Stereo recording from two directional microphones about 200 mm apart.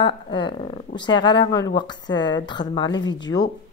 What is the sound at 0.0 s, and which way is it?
Speech, 25° left (ahead or behind).